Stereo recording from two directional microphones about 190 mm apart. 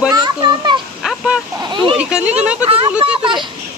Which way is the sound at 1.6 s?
25° right (ahead or behind).